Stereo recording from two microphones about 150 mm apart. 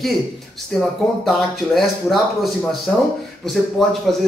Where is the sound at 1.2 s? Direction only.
Centre (ahead or behind).